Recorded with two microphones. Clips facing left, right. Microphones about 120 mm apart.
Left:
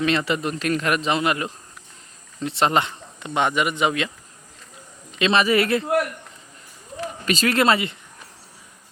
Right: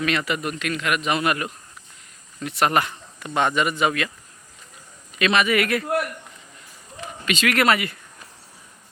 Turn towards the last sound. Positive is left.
turn(degrees=25)  # may be behind; listen again after turning